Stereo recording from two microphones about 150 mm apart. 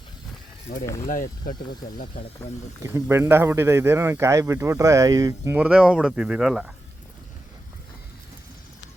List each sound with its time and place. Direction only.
1.0 s speech: 60° left (ahead or behind)
2.8 s a man's voice: 15° right (ahead or behind)
5.5 s speech: 5° right (ahead or behind)